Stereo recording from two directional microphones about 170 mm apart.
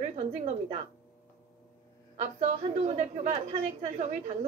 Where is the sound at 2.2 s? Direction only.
45° right (ahead or behind).